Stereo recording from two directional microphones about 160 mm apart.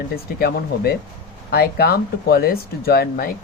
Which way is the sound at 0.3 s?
75° left (ahead or behind).